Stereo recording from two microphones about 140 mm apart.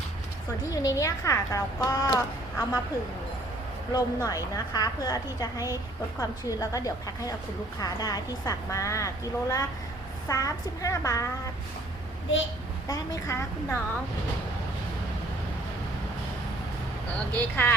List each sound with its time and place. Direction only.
0.7 s a woman's voice: 25° left (ahead or behind)
3.9 s a woman's voice: 25° left (ahead or behind)
12.9 s a woman's voice: 20° left (ahead or behind)
17.3 s speech: 10° left (ahead or behind)